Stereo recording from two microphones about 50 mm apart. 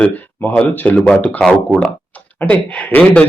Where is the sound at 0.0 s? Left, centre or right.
Left.